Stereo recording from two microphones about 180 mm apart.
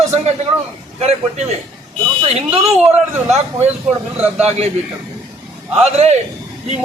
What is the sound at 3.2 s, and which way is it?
A man's voice, 35° right (ahead or behind).